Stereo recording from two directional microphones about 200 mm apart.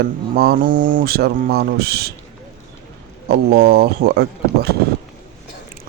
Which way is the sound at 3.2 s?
55° right (ahead or behind).